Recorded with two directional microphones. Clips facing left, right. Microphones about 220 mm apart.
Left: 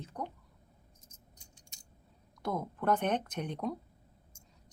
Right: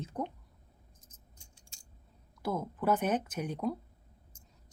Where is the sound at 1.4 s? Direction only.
20° left (ahead or behind).